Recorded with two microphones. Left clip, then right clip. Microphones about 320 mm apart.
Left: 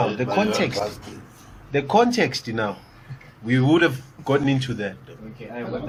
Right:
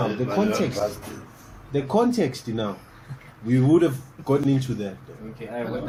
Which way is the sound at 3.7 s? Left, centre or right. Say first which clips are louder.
Left 1 dB; left.